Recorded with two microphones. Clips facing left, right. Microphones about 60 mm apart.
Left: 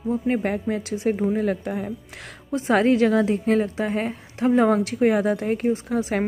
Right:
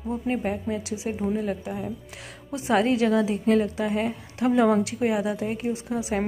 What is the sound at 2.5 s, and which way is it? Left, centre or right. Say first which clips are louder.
A woman's voice: left 3 dB; left.